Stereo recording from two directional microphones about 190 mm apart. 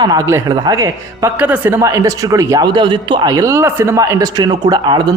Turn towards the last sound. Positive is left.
turn(degrees=-20)  # may be behind; listen again after turning